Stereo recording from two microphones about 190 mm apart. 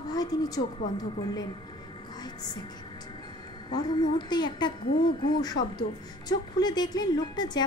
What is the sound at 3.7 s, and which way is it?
A woman's voice, 20° left (ahead or behind).